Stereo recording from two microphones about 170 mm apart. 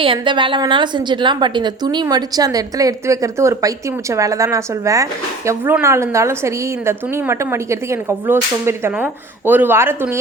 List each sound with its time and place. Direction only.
0.0 s a woman's voice: 30° right (ahead or behind); by 10.2 s 15° right (ahead or behind)